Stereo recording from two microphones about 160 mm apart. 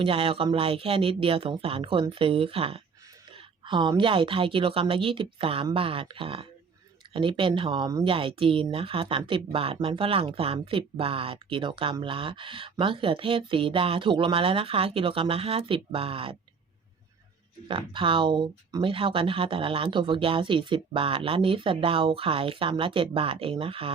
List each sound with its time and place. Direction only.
0.0 s speech: 35° right (ahead or behind)
17.7 s speech: 30° right (ahead or behind)